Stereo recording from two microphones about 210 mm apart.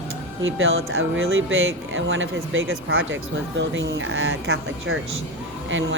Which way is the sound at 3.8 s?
60° right (ahead or behind).